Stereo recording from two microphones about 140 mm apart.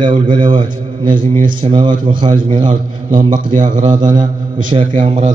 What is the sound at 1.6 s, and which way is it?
Speech, 35° right (ahead or behind).